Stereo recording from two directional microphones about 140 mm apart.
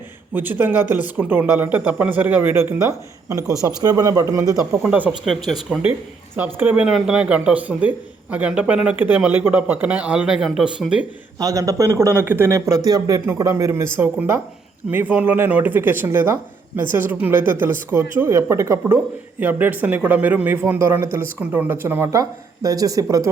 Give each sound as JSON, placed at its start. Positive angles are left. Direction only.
{"t": 0.3, "sound": "a man's voice", "side_deg": -15}
{"t": 4.8, "sound": "speech", "side_deg": -10}
{"t": 6.3, "sound": "speech", "side_deg": -10}
{"t": 11.3, "sound": "a man's voice", "side_deg": -25}